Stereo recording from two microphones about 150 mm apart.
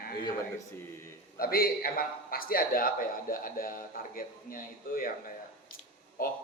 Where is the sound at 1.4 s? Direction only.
75° left (ahead or behind).